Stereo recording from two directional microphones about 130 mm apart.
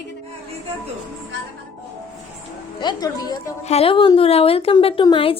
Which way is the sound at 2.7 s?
30° left (ahead or behind).